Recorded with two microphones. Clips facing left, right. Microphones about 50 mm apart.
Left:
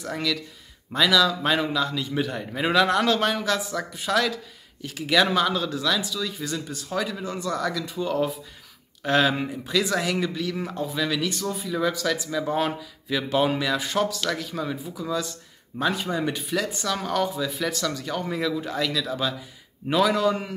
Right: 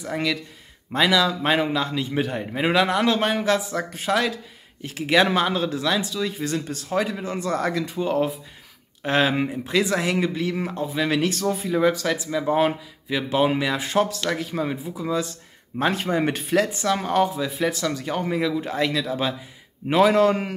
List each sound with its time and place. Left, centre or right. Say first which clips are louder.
0.0 s speech: right 2 dB; right
2.5 s speech: even; right
11.7 s speech: right 3 dB; right
12.3 s speech: right 4 dB; centre
15.8 s speech: right 3 dB; right
18.4 s speech: right 2 dB; centre
18.8 s a man's voice: right 4 dB; right